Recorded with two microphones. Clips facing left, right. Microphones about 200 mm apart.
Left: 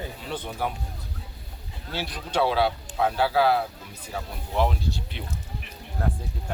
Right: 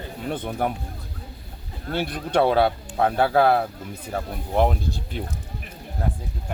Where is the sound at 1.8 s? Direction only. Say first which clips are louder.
Right 7 dB; 55° right (ahead or behind).